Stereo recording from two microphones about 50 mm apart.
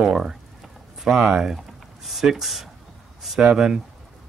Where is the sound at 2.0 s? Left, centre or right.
Centre.